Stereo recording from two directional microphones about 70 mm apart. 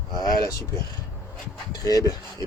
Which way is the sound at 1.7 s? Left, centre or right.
Left.